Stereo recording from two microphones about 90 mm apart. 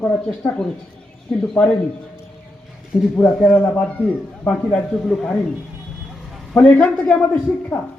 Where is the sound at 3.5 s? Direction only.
25° left (ahead or behind).